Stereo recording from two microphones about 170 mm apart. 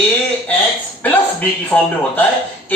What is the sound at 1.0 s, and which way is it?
A man's voice, 10° left (ahead or behind).